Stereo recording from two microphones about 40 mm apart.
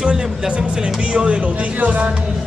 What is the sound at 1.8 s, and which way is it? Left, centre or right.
Speech, right.